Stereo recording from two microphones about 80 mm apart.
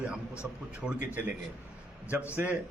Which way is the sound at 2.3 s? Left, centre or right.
Right.